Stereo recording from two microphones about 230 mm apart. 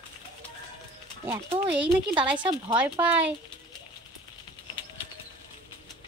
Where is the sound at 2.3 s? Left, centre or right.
Right.